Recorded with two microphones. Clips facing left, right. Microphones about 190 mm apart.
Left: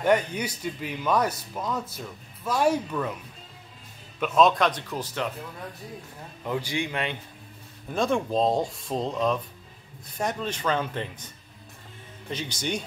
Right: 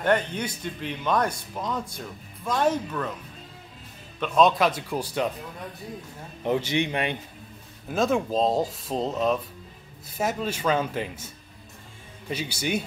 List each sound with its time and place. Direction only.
0.0 s speech: 10° left (ahead or behind)
4.2 s speech: centre (ahead or behind)
6.4 s a man's voice: 25° right (ahead or behind)
7.9 s speech: centre (ahead or behind)
10.1 s speech: 5° right (ahead or behind)